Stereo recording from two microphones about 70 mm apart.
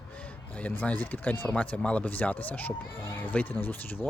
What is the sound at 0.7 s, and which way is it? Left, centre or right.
Speech, left.